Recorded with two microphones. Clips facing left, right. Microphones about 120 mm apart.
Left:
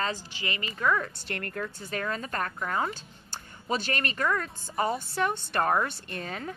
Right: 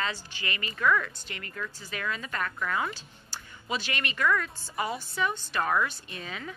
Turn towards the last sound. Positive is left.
turn(degrees=45)  # may be behind; listen again after turning